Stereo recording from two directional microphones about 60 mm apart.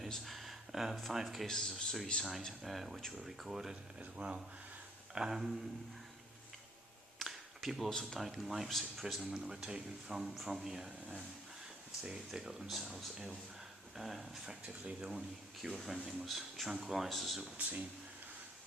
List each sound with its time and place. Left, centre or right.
0.1 s speech: centre
1.5 s speech: centre
4.0 s speech: centre
7.2 s a sound: centre
8.3 s speech: centre
12.0 s speech: centre
13.9 s speech: centre
15.6 s speech: centre
17.4 s speech: right